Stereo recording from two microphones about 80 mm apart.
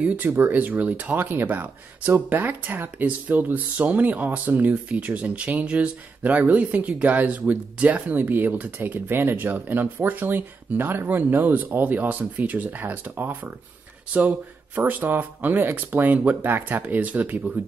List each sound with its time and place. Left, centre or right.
0.0 s speech: right
14.8 s speech: right